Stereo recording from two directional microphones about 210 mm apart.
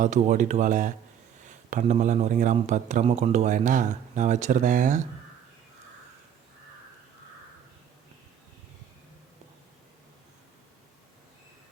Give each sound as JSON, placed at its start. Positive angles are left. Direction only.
{"t": 0.0, "sound": "speech", "side_deg": -35}